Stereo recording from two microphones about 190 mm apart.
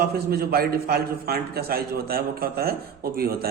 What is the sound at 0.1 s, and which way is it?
A man's voice, 55° right (ahead or behind).